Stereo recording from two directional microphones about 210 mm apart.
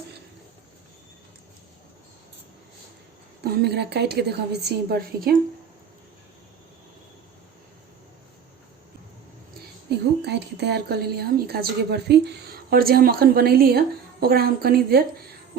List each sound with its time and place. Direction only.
3.4 s a woman's voice: 50° right (ahead or behind)
9.9 s a woman's voice: 55° right (ahead or behind)